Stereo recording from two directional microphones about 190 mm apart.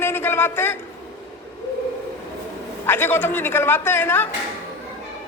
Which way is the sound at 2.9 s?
10° left (ahead or behind).